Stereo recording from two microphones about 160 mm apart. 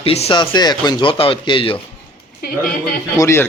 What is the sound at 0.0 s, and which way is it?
Speech, 40° left (ahead or behind).